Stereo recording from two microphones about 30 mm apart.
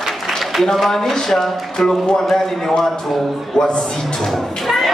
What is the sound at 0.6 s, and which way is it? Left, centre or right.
A man's voice, centre.